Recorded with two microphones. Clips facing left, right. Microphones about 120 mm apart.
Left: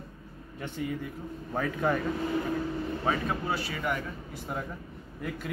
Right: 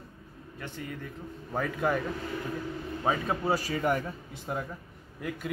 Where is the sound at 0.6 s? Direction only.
15° left (ahead or behind).